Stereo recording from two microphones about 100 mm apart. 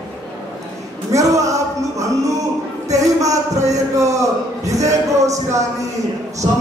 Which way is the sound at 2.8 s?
35° right (ahead or behind).